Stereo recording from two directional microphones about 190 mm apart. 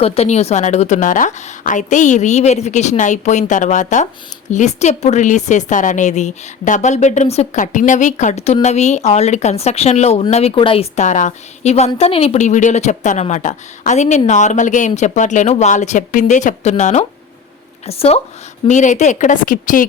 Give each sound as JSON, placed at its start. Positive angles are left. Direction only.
{"t": 0.0, "sound": "a woman's voice", "side_deg": 30}